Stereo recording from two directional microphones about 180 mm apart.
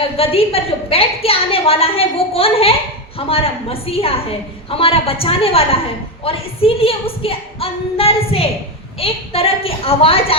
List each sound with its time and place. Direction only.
0.2 s a woman's voice: 30° left (ahead or behind)